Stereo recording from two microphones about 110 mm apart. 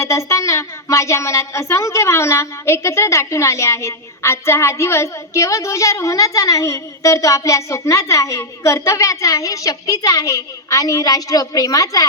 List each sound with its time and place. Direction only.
0.0 s a woman's voice: 25° left (ahead or behind)